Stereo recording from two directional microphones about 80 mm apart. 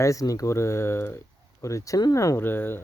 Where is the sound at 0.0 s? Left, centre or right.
Left.